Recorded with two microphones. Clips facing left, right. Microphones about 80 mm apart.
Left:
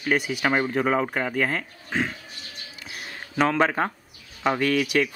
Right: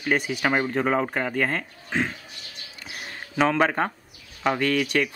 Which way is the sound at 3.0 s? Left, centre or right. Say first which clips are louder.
Even; centre.